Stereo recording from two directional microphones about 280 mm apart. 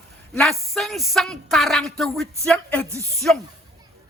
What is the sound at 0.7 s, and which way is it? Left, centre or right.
Speech, centre.